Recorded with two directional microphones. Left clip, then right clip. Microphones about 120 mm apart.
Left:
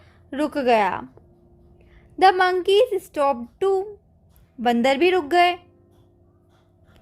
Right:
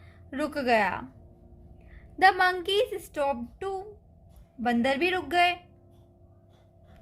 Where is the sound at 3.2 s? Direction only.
40° left (ahead or behind).